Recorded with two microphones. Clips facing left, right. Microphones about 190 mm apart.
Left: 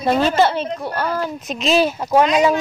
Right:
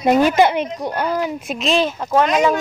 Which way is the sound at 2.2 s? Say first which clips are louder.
Even; 45° right (ahead or behind).